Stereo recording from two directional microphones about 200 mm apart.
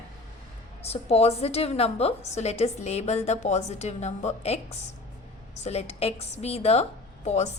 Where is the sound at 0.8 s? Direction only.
30° left (ahead or behind).